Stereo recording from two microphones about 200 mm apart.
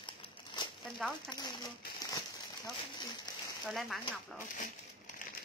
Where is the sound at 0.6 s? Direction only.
20° left (ahead or behind).